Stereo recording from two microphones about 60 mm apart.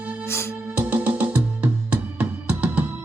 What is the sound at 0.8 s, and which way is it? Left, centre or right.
Music, right.